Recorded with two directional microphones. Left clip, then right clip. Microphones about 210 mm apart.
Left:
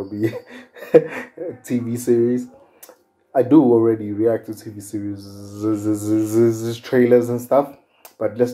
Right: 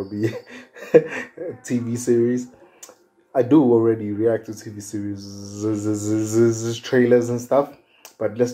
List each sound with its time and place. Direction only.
0.2 s speech: 5° left (ahead or behind)
3.3 s speech: 5° left (ahead or behind)